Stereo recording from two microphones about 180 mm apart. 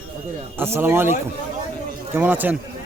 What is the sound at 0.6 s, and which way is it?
Speech, 10° right (ahead or behind).